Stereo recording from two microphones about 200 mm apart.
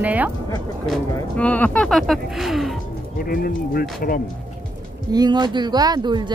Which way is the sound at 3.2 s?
45° left (ahead or behind).